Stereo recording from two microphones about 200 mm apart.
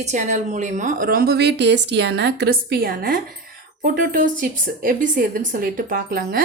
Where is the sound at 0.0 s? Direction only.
35° right (ahead or behind).